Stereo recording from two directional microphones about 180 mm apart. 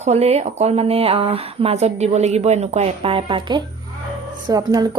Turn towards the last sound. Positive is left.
turn(degrees=-20)  # may be behind; listen again after turning